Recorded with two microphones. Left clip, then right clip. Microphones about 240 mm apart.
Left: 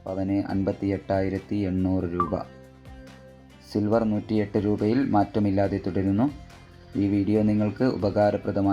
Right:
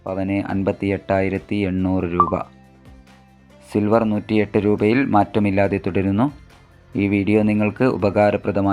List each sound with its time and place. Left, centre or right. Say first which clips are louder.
0.0 s speech: right 4 dB; centre
3.7 s speech: right 6 dB; right